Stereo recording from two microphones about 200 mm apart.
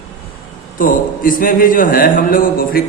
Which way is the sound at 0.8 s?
45° left (ahead or behind).